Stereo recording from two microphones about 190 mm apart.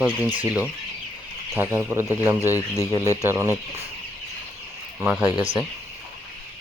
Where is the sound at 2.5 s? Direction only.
15° left (ahead or behind).